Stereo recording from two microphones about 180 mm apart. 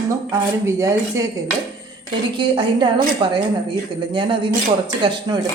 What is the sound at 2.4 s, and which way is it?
Speech, 25° right (ahead or behind).